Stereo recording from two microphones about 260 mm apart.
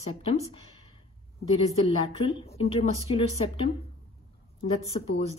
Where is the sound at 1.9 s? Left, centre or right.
Left.